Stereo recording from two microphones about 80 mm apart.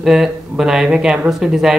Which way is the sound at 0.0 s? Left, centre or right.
Centre.